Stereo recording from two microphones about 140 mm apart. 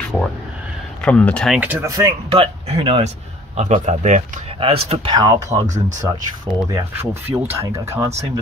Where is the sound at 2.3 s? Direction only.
45° right (ahead or behind).